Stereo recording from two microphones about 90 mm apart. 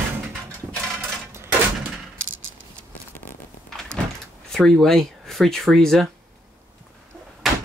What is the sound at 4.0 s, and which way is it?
Door, 10° left (ahead or behind).